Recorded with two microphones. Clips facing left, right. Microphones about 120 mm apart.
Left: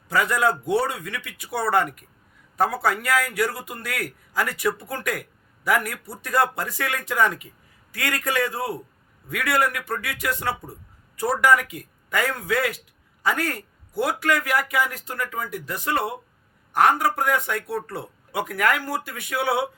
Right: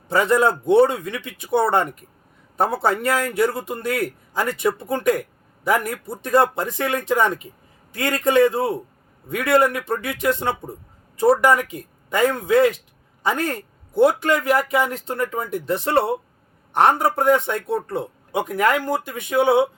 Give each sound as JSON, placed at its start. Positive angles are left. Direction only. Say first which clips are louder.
{"t": 0.1, "sound": "a man's voice", "louder": "right 4 dB", "side_deg": -25}